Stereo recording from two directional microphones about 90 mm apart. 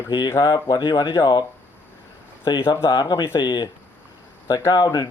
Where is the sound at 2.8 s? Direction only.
65° left (ahead or behind).